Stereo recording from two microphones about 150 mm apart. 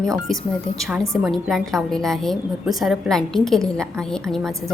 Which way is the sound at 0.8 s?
5° right (ahead or behind).